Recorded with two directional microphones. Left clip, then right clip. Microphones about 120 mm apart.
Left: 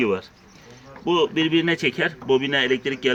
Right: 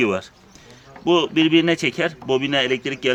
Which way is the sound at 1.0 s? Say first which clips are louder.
Right 3 dB; 90° right.